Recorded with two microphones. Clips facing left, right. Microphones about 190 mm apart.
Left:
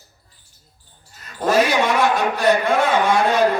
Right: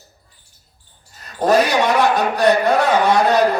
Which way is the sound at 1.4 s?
35° right (ahead or behind).